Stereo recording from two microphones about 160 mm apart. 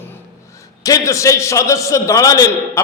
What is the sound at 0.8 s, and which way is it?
A man's voice, 20° left (ahead or behind).